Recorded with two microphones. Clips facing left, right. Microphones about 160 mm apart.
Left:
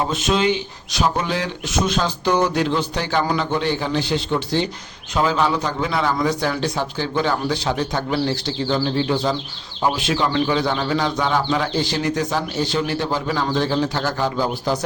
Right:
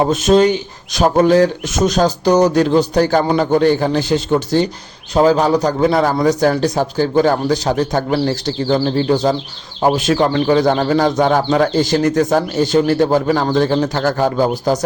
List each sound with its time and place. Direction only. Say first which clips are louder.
0.1 s a man's voice: right 8 dB; 45° right (ahead or behind)